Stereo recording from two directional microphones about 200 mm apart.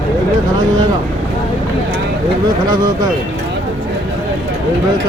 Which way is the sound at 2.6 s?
20° right (ahead or behind).